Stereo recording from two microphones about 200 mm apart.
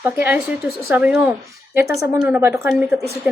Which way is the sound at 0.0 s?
10° right (ahead or behind).